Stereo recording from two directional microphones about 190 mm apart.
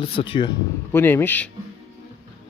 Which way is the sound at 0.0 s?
30° left (ahead or behind).